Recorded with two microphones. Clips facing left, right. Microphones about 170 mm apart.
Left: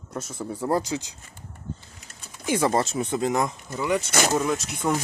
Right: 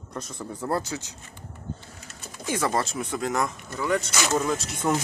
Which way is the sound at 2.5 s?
20° left (ahead or behind).